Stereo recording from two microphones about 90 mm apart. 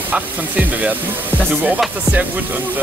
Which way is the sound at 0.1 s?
15° right (ahead or behind).